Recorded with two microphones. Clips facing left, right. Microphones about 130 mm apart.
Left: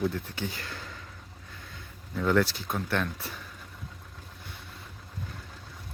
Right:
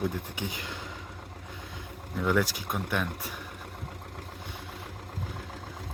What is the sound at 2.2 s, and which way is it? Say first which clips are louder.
Speech: left 2 dB; 10° right (ahead or behind).